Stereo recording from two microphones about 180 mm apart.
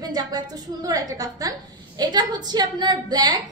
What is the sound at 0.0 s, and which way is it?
A woman's voice, 20° right (ahead or behind).